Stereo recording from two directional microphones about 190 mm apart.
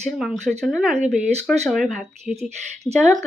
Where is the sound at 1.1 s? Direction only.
40° right (ahead or behind).